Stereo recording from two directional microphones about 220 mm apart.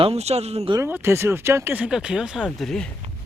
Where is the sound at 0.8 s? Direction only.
10° right (ahead or behind).